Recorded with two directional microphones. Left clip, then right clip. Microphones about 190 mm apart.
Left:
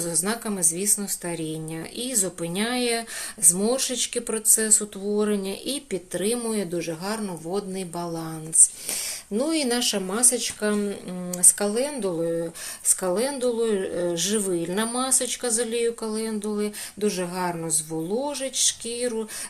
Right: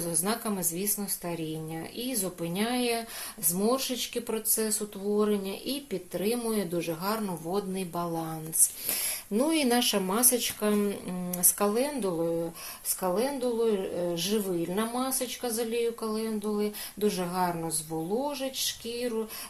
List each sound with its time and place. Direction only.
0.0 s speech: 20° left (ahead or behind)
8.9 s speech: centre (ahead or behind)
13.0 s speech: 25° left (ahead or behind)